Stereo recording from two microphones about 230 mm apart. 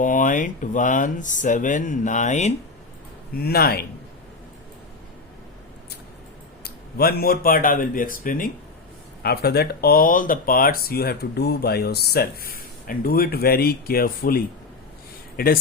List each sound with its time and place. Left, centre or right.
0.0 s speech: left
3.4 s a man's voice: left
6.7 s speech: left